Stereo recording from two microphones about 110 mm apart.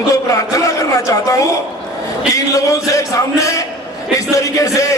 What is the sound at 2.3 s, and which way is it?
A man's voice, 30° left (ahead or behind).